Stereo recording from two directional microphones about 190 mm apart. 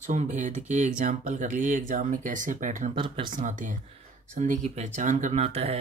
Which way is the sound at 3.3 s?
40° right (ahead or behind).